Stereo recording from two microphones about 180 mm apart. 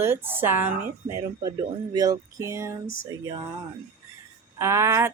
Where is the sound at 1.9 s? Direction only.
20° right (ahead or behind).